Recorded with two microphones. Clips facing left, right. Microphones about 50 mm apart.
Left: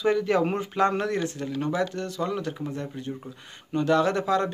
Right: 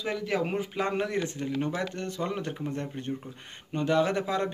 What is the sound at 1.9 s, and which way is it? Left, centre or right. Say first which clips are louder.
Speech: left 3 dB; right.